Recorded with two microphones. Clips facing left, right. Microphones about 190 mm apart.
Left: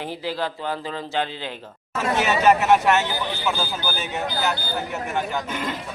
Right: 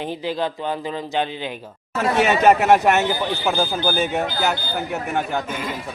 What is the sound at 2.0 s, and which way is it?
Speech, 60° right (ahead or behind).